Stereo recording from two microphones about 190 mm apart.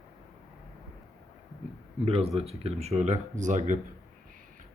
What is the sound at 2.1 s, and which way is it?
Speech, 30° right (ahead or behind).